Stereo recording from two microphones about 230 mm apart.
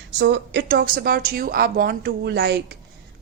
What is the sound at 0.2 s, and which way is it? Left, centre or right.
Speech, right.